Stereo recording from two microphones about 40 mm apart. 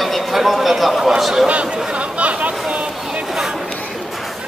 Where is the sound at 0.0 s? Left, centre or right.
Centre.